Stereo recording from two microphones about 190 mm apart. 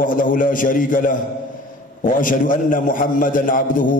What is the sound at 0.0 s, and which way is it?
A man's voice, 45° left (ahead or behind).